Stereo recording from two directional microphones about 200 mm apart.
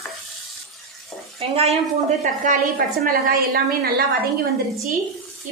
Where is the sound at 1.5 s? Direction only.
30° right (ahead or behind).